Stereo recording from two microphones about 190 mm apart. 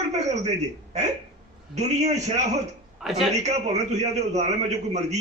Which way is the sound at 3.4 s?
35° right (ahead or behind).